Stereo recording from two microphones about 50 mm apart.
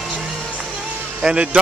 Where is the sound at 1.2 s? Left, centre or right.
Centre.